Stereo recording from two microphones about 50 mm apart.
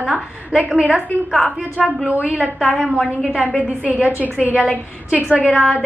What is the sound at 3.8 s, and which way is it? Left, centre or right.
A woman's voice, right.